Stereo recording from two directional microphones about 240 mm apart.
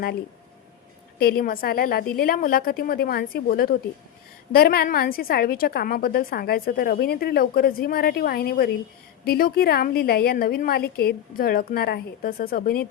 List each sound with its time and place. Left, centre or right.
1.2 s a woman's voice: left